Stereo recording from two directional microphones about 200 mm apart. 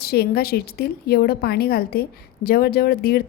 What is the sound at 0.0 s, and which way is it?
A woman's voice, 50° left (ahead or behind).